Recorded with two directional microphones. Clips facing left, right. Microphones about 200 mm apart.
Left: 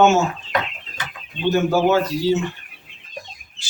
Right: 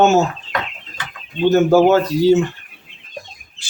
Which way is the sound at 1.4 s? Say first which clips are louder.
Right 6 dB; 45° right (ahead or behind).